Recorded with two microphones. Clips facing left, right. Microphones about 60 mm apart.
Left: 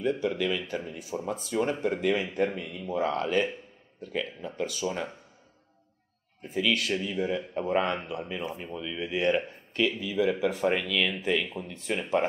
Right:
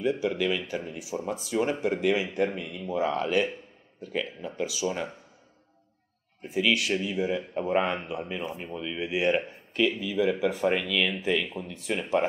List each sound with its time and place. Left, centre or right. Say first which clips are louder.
0.0 s speech: right 1 dB; centre
6.4 s a man's voice: right 2 dB; centre